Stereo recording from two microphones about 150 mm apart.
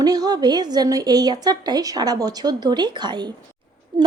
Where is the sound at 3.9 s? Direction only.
30° right (ahead or behind).